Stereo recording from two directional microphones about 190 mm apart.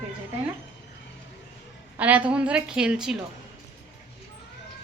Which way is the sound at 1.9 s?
10° right (ahead or behind).